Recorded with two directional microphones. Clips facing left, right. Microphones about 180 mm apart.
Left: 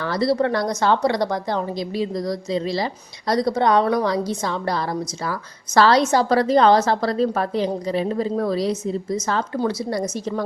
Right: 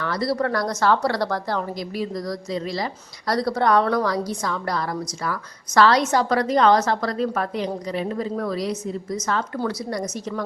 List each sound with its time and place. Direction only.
0.0 s a woman's voice: 30° left (ahead or behind)